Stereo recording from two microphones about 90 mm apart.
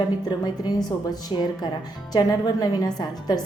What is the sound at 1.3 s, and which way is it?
Speech, 65° left (ahead or behind).